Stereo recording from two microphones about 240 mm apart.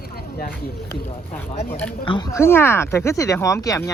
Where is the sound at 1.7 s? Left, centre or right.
Centre.